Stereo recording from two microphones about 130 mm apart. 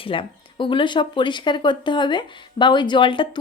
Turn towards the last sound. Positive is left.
turn(degrees=40)  # may be behind; listen again after turning